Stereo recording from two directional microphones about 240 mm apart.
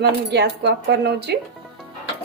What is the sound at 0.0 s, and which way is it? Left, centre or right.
Speech, right.